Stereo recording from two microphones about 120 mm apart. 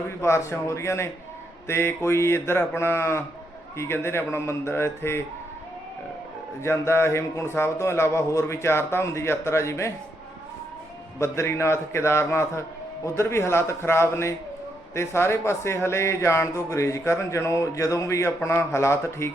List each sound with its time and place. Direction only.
0.2 s speech: 20° left (ahead or behind)
6.6 s speech: 20° left (ahead or behind)
11.2 s speech: 25° left (ahead or behind)